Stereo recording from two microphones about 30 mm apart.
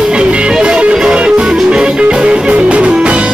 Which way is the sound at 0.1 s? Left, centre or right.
Right.